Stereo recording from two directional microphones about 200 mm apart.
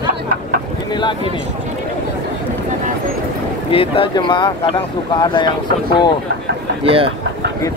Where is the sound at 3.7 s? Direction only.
25° left (ahead or behind).